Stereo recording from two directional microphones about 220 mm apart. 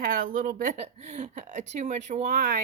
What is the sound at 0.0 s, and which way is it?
Speech, 40° right (ahead or behind).